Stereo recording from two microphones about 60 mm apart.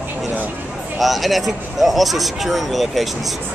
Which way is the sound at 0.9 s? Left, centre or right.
Centre.